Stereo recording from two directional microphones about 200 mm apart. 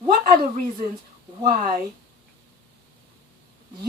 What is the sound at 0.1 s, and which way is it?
A woman's voice, 45° right (ahead or behind).